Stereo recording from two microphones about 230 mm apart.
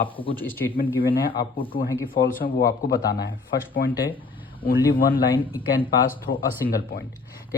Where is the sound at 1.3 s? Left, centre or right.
Left.